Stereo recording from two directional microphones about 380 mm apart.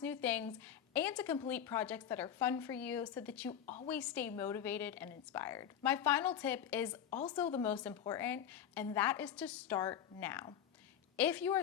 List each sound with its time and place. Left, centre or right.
0.0 s speech: centre
3.5 s a woman's voice: centre
3.8 s speech: centre
7.1 s speech: centre
7.3 s speech: centre